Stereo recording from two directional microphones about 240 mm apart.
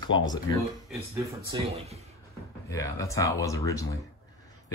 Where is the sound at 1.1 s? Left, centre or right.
Right.